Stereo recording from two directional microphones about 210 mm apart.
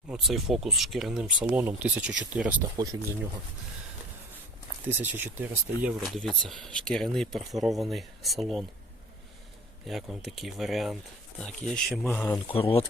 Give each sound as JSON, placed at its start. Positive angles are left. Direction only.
{"t": 0.1, "sound": "speech", "side_deg": 0}
{"t": 2.7, "sound": "speech", "side_deg": -15}
{"t": 4.9, "sound": "speech", "side_deg": -10}
{"t": 9.8, "sound": "speech", "side_deg": 0}
{"t": 12.5, "sound": "speech", "side_deg": 25}